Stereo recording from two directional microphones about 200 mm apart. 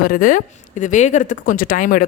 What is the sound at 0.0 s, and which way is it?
Speech, 45° left (ahead or behind).